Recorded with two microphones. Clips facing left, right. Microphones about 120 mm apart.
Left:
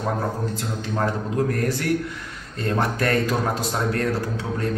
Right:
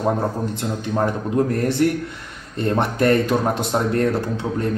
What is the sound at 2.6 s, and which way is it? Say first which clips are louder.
A man's voice: right 4 dB; 25° right (ahead or behind).